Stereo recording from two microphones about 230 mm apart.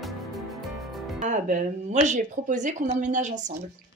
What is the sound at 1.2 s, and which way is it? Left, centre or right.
Speech, right.